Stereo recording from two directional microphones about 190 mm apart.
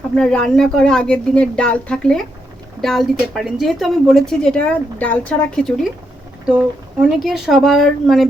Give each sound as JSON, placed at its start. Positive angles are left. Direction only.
{"t": 0.2, "sound": "a woman's voice", "side_deg": 5}
{"t": 6.4, "sound": "a sound", "side_deg": -5}
{"t": 7.2, "sound": "a woman's voice", "side_deg": 0}